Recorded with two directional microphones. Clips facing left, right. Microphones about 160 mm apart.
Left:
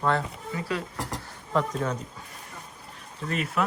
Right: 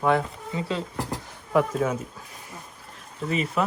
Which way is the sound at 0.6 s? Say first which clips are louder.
Right 2 dB; 25° right (ahead or behind).